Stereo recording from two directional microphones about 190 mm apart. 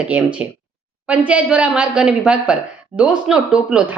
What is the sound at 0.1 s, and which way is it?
Speech, 5° right (ahead or behind).